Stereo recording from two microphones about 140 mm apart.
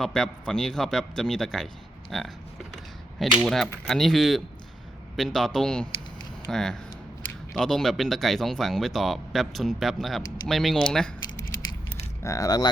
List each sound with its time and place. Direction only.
0.0 s speech: 5° left (ahead or behind)
3.3 s speech: centre (ahead or behind)
12.2 s speech: 25° left (ahead or behind)